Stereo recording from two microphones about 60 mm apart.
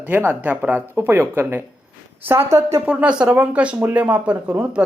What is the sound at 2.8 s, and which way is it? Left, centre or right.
Speech, centre.